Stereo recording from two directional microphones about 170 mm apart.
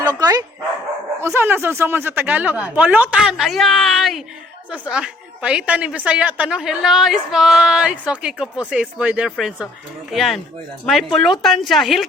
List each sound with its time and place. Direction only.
0.2 s speech: 20° right (ahead or behind); by 12.0 s centre (ahead or behind)